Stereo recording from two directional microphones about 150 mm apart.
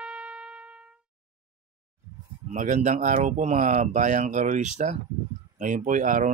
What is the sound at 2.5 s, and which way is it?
Speech, 55° right (ahead or behind).